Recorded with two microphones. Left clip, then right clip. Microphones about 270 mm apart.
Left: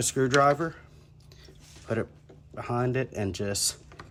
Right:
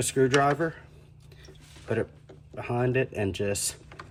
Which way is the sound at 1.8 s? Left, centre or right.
Centre.